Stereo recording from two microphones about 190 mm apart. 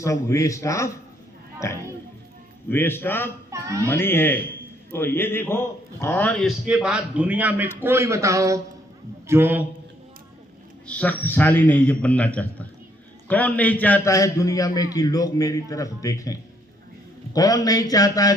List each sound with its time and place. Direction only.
0.0 s a man's voice: 15° left (ahead or behind)
2.6 s a man's voice: 10° left (ahead or behind)
3.5 s music: 15° right (ahead or behind)
3.8 s a man's voice: 10° left (ahead or behind)
6.7 s a man's voice: 5° right (ahead or behind)
10.8 s a man's voice: 10° left (ahead or behind)